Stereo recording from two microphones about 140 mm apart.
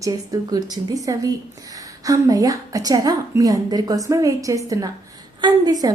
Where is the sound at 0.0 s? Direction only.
25° right (ahead or behind).